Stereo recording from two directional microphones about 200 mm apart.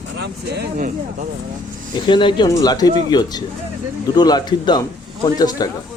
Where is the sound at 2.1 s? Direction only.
25° left (ahead or behind).